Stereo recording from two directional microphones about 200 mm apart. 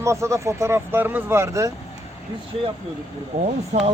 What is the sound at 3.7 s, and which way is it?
Speech, 35° right (ahead or behind).